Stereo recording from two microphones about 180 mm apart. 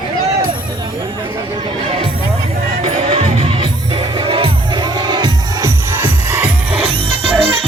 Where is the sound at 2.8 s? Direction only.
35° right (ahead or behind).